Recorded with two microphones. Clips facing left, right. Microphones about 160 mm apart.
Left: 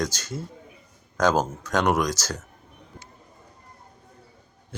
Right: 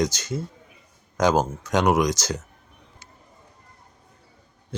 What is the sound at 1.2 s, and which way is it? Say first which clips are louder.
Speech: right 1 dB; 10° right (ahead or behind).